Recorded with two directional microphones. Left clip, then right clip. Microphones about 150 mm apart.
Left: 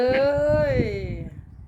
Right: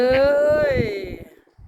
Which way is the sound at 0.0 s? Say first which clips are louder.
Right 4 dB; 40° right (ahead or behind).